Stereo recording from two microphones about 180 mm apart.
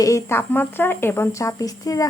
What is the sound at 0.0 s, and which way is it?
Speech, 15° left (ahead or behind).